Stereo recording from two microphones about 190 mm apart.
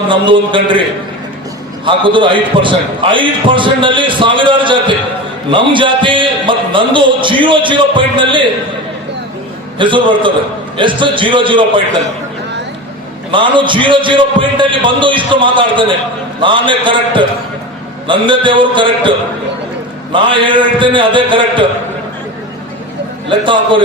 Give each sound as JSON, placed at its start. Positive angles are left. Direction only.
{"t": 0.1, "sound": "a man's voice", "side_deg": -25}
{"t": 9.7, "sound": "a man's voice", "side_deg": -25}
{"t": 13.3, "sound": "a man's voice", "side_deg": -25}
{"t": 20.1, "sound": "a man's voice", "side_deg": -25}
{"t": 23.3, "sound": "a man's voice", "side_deg": -25}